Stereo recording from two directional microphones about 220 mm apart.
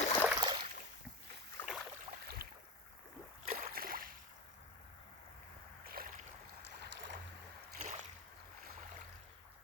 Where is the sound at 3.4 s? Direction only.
35° right (ahead or behind).